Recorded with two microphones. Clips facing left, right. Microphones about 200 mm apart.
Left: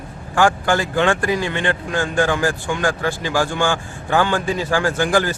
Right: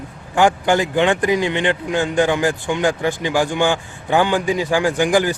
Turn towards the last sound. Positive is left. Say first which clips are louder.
# right 2 dB
turn(degrees=-15)  # may be behind; listen again after turning